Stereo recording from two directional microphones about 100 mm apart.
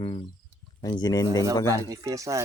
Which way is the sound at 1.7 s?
30° right (ahead or behind).